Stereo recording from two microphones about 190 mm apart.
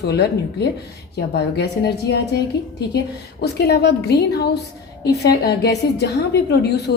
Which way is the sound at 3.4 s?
60° left (ahead or behind).